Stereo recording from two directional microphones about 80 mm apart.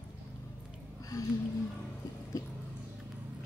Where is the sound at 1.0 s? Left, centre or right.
Left.